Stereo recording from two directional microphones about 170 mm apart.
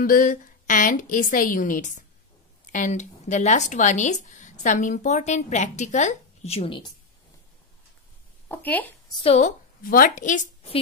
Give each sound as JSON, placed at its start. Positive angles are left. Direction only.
{"t": 0.0, "sound": "speech", "side_deg": 55}
{"t": 8.5, "sound": "speech", "side_deg": 10}
{"t": 9.1, "sound": "a woman's voice", "side_deg": 35}
{"t": 9.8, "sound": "speech", "side_deg": 55}